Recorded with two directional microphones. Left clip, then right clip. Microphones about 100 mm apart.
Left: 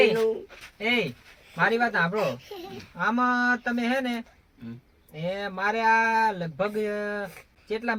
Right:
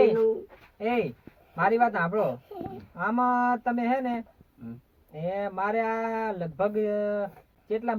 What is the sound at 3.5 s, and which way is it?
Speech, 5° right (ahead or behind).